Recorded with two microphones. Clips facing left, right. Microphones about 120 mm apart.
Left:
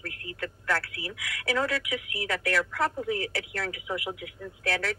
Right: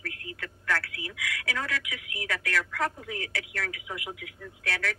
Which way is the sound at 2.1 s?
35° left (ahead or behind).